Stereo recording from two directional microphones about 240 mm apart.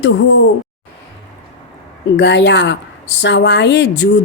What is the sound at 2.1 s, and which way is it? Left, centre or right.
Speech, left.